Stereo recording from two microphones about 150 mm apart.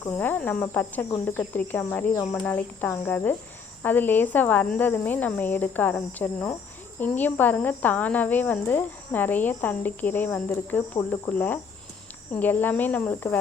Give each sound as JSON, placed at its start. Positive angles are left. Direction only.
{"t": 0.0, "sound": "speech", "side_deg": 10}